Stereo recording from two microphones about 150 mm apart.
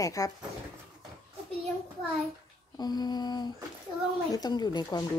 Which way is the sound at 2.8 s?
25° left (ahead or behind).